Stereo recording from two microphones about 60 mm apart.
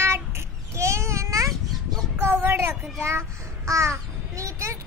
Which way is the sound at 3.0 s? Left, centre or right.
Right.